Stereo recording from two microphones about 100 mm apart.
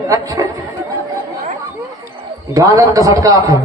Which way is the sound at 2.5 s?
35° right (ahead or behind).